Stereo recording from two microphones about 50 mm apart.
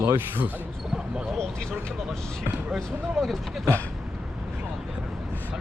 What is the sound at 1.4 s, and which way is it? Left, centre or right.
Speech, centre.